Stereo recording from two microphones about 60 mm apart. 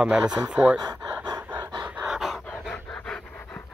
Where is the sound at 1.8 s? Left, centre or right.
Centre.